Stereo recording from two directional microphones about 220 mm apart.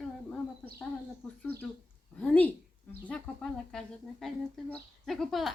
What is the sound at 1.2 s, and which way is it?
A woman's voice, centre (ahead or behind).